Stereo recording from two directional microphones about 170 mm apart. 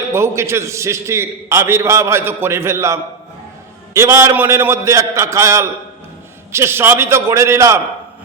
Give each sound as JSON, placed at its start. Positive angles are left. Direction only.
{"t": 0.1, "sound": "a man's voice", "side_deg": -15}